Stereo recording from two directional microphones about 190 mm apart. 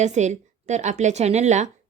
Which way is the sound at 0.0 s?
35° right (ahead or behind).